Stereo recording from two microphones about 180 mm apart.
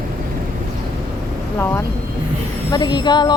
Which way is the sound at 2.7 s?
25° left (ahead or behind).